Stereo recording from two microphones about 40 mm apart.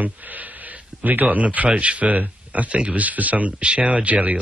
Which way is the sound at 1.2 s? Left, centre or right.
Right.